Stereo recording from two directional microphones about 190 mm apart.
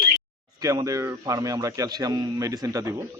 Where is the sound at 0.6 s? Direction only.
15° right (ahead or behind).